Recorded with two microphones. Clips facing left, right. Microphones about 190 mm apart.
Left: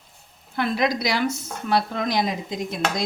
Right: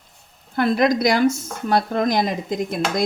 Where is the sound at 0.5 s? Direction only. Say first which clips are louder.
Right 5 dB; 45° right (ahead or behind).